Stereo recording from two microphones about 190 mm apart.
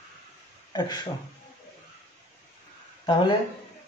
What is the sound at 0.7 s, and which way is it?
Speech, 20° left (ahead or behind).